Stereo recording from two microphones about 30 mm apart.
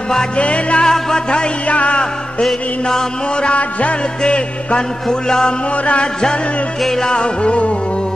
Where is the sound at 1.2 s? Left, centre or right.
Left.